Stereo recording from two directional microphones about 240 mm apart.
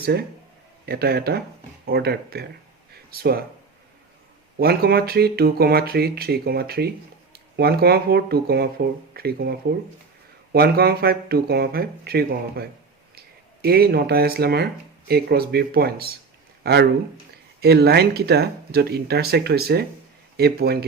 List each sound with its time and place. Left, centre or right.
0.0 s speech: right
4.6 s speech: right